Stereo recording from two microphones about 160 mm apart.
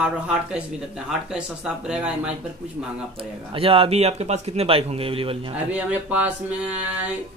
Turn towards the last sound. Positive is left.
turn(degrees=-10)  # may be behind; listen again after turning